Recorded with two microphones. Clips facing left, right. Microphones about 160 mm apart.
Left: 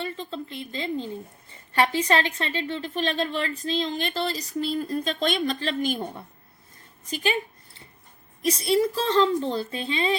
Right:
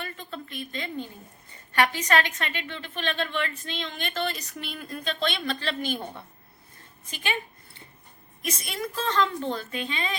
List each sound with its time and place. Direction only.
0.0 s a sound: 25° left (ahead or behind)
1.7 s a woman's voice: 30° left (ahead or behind)
7.1 s a woman's voice: 35° left (ahead or behind)
8.4 s a woman's voice: 35° left (ahead or behind)